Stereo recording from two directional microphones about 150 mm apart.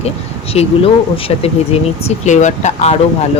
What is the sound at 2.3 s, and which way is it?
Speech, 50° left (ahead or behind).